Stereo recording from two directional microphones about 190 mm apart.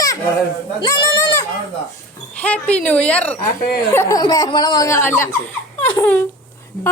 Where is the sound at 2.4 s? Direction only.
5° left (ahead or behind).